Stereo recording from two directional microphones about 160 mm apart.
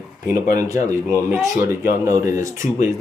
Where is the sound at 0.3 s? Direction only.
20° right (ahead or behind).